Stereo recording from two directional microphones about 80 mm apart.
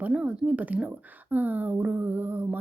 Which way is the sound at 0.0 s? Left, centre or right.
Centre.